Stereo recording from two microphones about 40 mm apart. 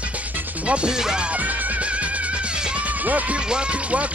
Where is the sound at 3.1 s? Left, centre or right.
Right.